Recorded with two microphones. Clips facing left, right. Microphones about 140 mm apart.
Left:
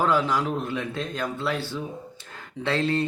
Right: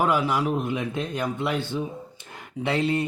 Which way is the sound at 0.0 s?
10° right (ahead or behind).